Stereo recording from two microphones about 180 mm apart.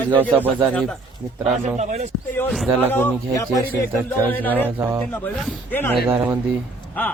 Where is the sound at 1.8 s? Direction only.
40° right (ahead or behind).